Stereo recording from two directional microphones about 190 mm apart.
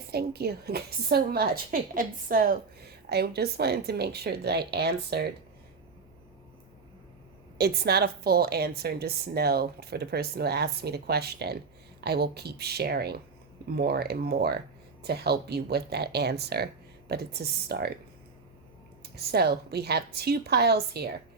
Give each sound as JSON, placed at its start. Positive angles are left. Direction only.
{"t": 0.1, "sound": "a woman's voice", "side_deg": -55}
{"t": 7.6, "sound": "a woman's voice", "side_deg": -55}
{"t": 19.1, "sound": "a woman's voice", "side_deg": -55}